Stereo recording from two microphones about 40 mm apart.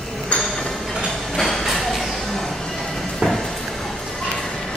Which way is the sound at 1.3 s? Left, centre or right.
Centre.